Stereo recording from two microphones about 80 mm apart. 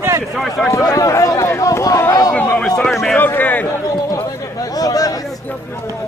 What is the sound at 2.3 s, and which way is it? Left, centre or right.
Speech, left.